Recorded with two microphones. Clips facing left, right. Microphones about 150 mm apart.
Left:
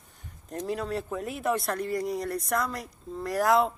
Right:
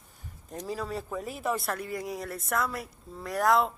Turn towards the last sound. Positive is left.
turn(degrees=0)  # may be behind; listen again after turning